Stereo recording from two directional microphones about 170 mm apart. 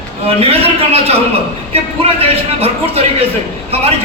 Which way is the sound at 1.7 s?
35° right (ahead or behind).